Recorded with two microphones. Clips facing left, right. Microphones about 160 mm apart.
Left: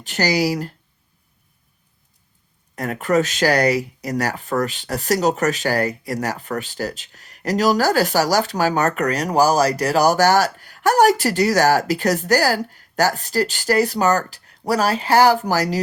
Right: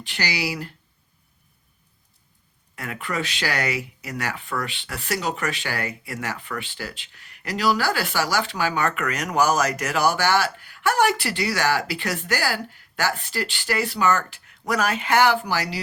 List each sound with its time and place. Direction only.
0.0 s speech: 45° left (ahead or behind)
2.7 s speech: 40° left (ahead or behind)